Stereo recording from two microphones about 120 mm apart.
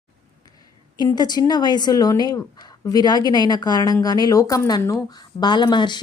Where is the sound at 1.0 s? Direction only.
35° left (ahead or behind).